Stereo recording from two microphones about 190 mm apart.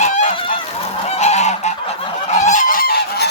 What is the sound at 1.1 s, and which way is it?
Goose, 35° left (ahead or behind).